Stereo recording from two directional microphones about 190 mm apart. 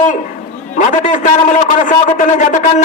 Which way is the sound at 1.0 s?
40° left (ahead or behind).